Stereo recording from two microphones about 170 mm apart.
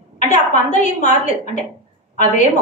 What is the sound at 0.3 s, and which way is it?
Speech, 45° left (ahead or behind).